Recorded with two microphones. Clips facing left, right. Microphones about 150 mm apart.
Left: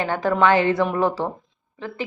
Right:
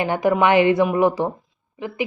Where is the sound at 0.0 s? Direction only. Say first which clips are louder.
Right 2 dB; 15° right (ahead or behind).